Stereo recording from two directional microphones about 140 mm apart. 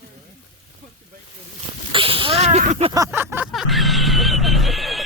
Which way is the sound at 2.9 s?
20° right (ahead or behind).